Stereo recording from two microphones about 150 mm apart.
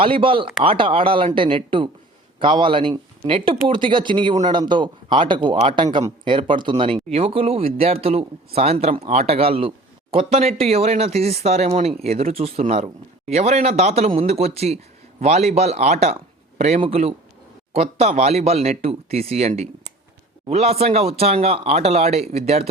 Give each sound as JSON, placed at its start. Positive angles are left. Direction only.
{"t": 0.0, "sound": "a man's voice", "side_deg": -35}